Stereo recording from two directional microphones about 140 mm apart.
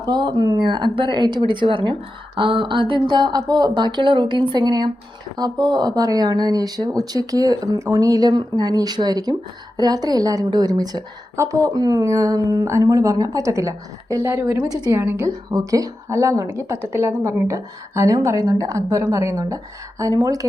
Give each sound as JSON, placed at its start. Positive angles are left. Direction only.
{"t": 0.0, "sound": "a woman's voice", "side_deg": -30}
{"t": 15.3, "sound": "a woman's voice", "side_deg": -25}